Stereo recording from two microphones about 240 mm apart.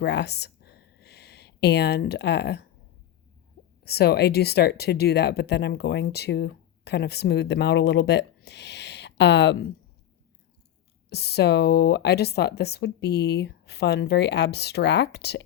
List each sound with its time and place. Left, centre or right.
0.0 s a sound: left
3.8 s speech: left
11.1 s speech: left